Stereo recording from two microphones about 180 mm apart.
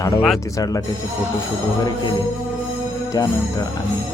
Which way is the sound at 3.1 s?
20° left (ahead or behind).